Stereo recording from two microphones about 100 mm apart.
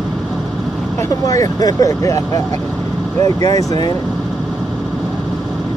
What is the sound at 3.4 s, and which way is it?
Speech, 40° left (ahead or behind).